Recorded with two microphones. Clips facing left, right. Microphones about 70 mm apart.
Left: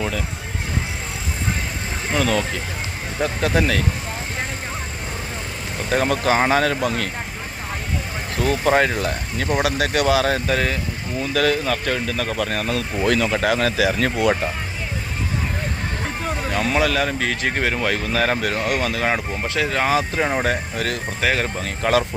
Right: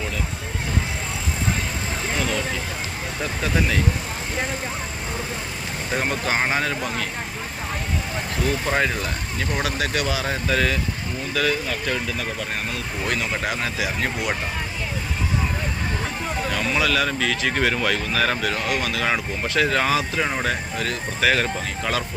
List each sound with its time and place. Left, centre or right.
2.1 s speech: left
3.4 s speech: left
5.9 s speech: left
8.4 s speech: left
10.3 s speech: left
11.3 s speech: left
13.1 s speech: left
16.6 s speech: left
17.6 s speech: left
17.9 s speech: left
19.5 s speech: centre
19.9 s speech: left
21.2 s speech: left
21.6 s speech: left